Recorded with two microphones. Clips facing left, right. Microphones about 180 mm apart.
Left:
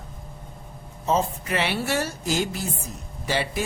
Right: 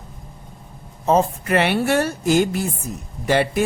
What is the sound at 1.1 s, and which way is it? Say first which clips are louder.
A woman's voice: right 6 dB; 60° right (ahead or behind).